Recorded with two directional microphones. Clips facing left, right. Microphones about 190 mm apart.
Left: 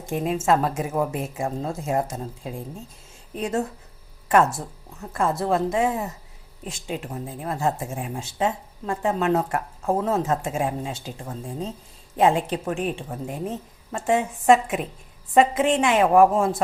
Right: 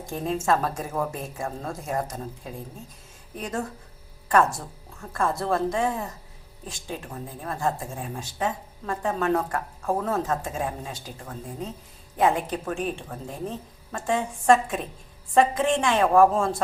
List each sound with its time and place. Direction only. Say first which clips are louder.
0.0 s speech: left 3 dB; 20° left (ahead or behind)